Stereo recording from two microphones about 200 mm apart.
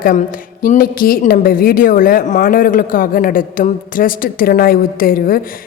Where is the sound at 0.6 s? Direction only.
45° left (ahead or behind).